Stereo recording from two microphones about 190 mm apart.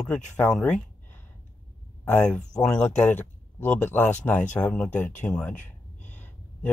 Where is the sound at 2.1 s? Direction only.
10° left (ahead or behind).